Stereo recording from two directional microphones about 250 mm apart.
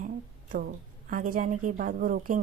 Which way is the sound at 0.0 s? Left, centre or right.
Right.